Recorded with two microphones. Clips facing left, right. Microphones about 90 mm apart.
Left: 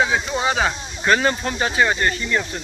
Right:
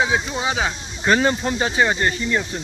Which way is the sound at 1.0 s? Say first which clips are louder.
Right 1 dB; 25° right (ahead or behind).